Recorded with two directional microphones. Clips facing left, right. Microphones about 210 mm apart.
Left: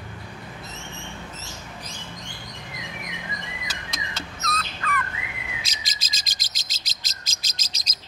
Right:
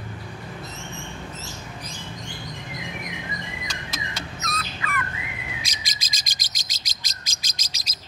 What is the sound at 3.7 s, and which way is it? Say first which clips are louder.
Bird: right 2 dB; 5° right (ahead or behind).